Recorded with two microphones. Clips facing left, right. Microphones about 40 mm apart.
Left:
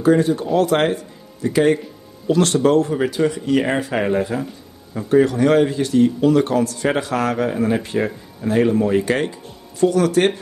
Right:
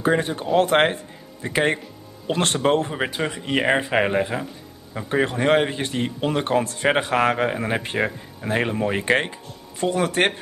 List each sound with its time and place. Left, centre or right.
0.0 s a man's voice: right